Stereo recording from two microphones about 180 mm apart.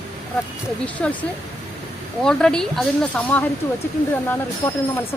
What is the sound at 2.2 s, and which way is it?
Speech, 5° left (ahead or behind).